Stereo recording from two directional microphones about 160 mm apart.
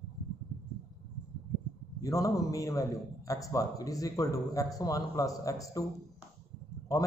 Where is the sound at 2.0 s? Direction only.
20° left (ahead or behind).